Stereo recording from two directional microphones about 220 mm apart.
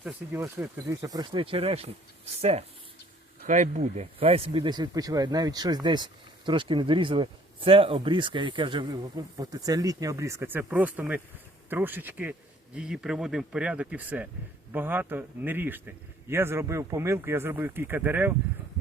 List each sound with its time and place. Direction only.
0.0 s a man's voice: 10° right (ahead or behind)